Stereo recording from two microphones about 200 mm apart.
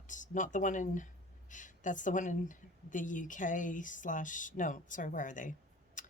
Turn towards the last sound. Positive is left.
turn(degrees=40)  # may be behind; listen again after turning